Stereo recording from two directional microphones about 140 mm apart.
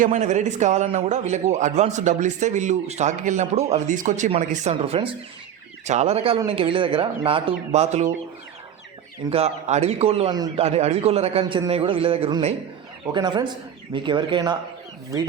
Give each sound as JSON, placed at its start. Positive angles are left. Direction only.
{"t": 0.0, "sound": "a man's voice", "side_deg": -60}
{"t": 9.3, "sound": "a man's voice", "side_deg": -50}
{"t": 13.1, "sound": "a man's voice", "side_deg": -35}